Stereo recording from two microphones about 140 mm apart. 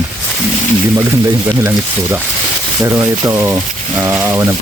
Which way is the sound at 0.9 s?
15° right (ahead or behind).